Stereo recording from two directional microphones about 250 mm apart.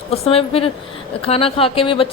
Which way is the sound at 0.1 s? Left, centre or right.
Left.